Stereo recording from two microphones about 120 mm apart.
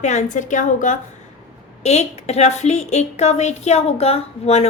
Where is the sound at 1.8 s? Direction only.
65° left (ahead or behind).